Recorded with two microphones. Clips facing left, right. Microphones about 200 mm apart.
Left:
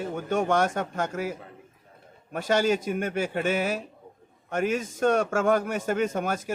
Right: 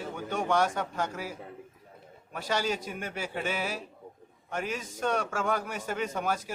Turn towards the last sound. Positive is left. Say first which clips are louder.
# left 4 dB
turn(degrees=50)  # may be behind; listen again after turning